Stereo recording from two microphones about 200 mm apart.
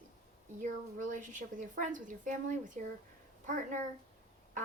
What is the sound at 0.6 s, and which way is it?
A woman's voice, 40° right (ahead or behind).